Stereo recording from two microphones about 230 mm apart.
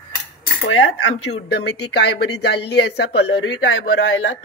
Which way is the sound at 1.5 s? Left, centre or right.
Left.